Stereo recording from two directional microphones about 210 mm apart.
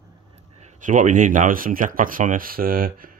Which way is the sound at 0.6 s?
35° right (ahead or behind).